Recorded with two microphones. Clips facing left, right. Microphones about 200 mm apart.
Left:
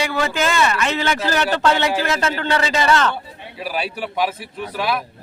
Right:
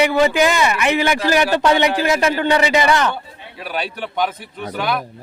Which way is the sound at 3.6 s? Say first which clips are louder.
Even; 5° left (ahead or behind).